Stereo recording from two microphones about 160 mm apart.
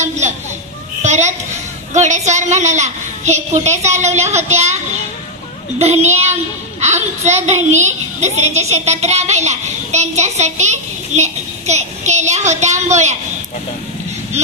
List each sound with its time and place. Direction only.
0.0 s a sound: 45° right (ahead or behind)
1.9 s a woman's voice: 45° right (ahead or behind)
5.8 s a woman's voice: 45° right (ahead or behind)
14.4 s a woman's voice: 45° right (ahead or behind)